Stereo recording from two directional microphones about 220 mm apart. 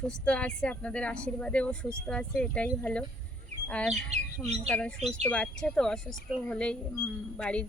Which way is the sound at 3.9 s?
30° right (ahead or behind).